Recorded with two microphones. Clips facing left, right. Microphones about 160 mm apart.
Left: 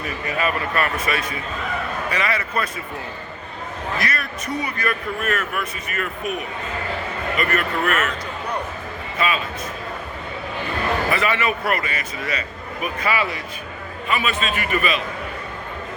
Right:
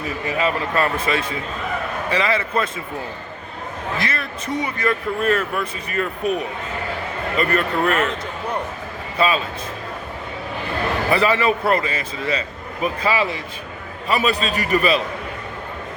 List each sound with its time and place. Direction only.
0.3 s a man's voice: 25° right (ahead or behind)
3.9 s a man's voice: 25° right (ahead or behind)
9.1 s a man's voice: 30° right (ahead or behind)
11.1 s a man's voice: 30° right (ahead or behind)